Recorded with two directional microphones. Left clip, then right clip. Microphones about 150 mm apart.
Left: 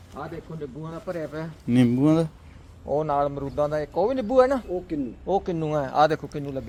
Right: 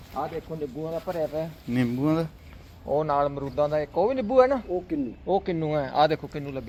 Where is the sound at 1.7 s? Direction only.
90° left.